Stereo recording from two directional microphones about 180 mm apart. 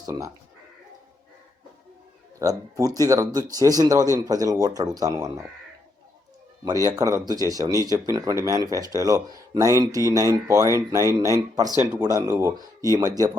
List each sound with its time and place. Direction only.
0.0 s speech: 20° right (ahead or behind)
2.4 s speech: 20° right (ahead or behind)
6.8 s speech: 15° right (ahead or behind)